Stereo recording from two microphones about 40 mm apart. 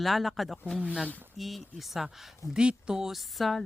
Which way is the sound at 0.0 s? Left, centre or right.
Centre.